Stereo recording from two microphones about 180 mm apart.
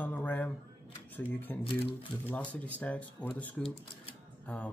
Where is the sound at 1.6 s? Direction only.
30° left (ahead or behind).